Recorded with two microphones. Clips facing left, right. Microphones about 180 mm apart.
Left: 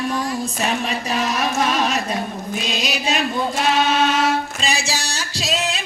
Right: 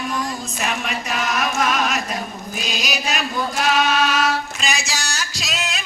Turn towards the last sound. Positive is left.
turn(degrees=30)  # may be behind; listen again after turning